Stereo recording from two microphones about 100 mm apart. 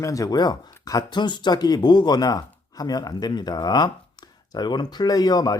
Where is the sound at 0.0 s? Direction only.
35° left (ahead or behind).